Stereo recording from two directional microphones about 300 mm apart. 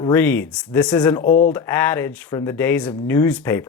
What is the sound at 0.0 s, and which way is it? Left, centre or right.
Speech, centre.